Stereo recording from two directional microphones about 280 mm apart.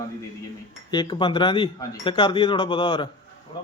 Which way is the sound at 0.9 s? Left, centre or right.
Centre.